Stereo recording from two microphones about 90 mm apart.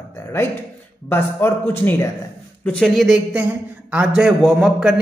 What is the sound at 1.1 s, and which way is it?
Speech, 20° left (ahead or behind).